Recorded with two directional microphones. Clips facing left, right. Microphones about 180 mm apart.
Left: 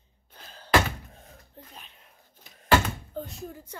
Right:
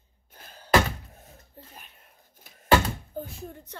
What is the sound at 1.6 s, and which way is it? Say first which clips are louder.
Speech: even; 10° right (ahead or behind).